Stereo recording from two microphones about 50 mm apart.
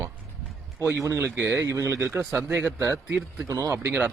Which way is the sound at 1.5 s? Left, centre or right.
Right.